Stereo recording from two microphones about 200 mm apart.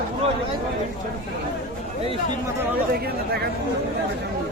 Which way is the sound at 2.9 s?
50° right (ahead or behind).